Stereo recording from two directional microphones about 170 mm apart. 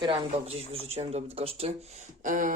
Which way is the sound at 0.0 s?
30° right (ahead or behind).